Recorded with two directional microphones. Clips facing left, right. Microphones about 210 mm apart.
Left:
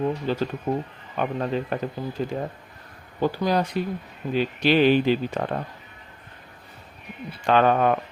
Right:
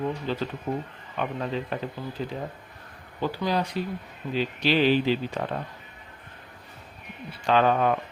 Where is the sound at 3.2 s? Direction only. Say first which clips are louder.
Left 4 dB; 50° left (ahead or behind).